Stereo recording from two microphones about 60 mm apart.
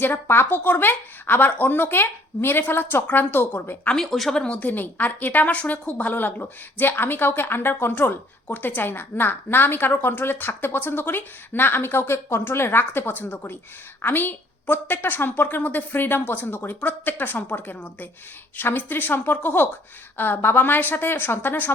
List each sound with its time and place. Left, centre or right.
0.0 s a woman's voice: left
3.9 s speech: centre
4.4 s a woman's voice: left